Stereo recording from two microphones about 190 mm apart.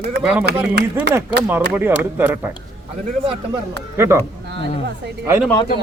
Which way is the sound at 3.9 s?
15° right (ahead or behind).